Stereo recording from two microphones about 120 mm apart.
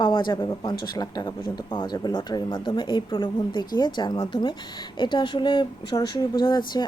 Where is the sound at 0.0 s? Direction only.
40° left (ahead or behind).